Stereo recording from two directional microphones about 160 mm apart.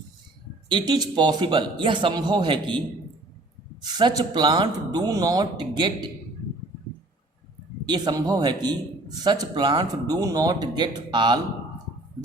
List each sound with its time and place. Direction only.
0.7 s a man's voice: 30° right (ahead or behind)
7.9 s a man's voice: 25° right (ahead or behind)